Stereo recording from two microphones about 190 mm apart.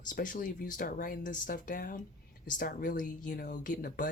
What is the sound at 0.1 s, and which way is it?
Speech, 45° left (ahead or behind).